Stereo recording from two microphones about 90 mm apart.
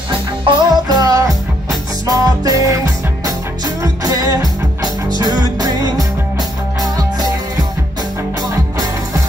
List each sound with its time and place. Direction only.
0.5 s music: 50° right (ahead or behind)